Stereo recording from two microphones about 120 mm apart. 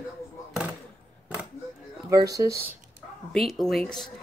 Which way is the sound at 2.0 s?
30° right (ahead or behind).